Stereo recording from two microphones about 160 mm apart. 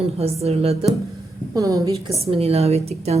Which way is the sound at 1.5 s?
20° right (ahead or behind).